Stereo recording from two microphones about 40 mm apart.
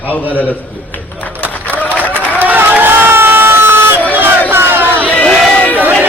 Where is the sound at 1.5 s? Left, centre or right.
Left.